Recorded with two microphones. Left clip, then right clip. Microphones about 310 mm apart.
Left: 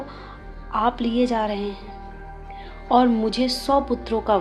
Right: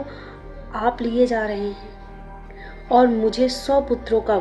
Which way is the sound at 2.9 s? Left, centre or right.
Left.